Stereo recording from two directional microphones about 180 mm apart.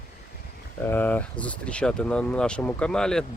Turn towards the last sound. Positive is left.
turn(degrees=5)  # may be behind; listen again after turning